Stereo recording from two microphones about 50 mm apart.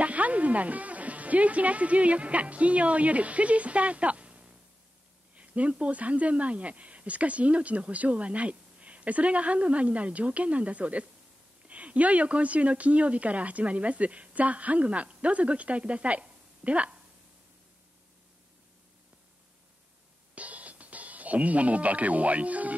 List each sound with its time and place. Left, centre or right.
0.0 s speech: right
20.3 s music: right